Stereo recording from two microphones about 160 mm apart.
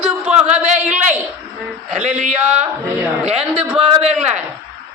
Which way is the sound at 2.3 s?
10° right (ahead or behind).